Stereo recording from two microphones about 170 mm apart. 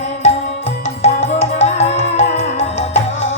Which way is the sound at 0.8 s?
40° left (ahead or behind).